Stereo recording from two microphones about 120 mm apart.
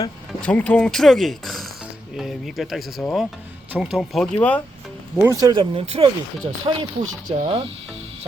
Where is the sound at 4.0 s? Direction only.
5° left (ahead or behind).